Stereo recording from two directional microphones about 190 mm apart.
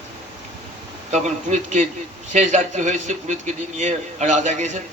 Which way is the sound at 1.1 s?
35° right (ahead or behind).